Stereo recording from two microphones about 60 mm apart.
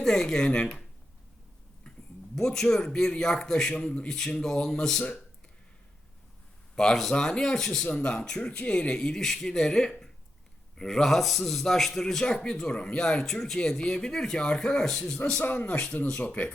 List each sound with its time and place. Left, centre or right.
0.0 s speech: centre
2.3 s speech: centre
6.7 s speech: centre
15.4 s speech: left